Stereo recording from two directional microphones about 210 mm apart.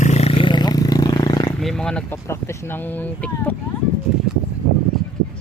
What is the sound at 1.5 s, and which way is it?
Speech, 5° left (ahead or behind).